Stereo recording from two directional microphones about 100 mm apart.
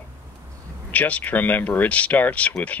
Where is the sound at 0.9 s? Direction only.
15° left (ahead or behind).